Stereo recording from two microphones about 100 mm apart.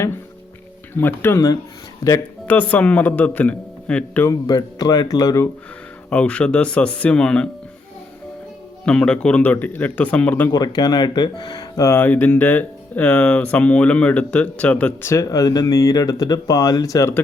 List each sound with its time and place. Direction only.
0.9 s speech: 20° left (ahead or behind)
2.5 s speech: 15° left (ahead or behind)
4.3 s speech: 40° left (ahead or behind)
6.1 s speech: 15° left (ahead or behind)
8.8 s speech: 10° left (ahead or behind)
10.5 s speech: 40° left (ahead or behind)
11.9 s speech: 20° left (ahead or behind)
15.1 s speech: 35° left (ahead or behind)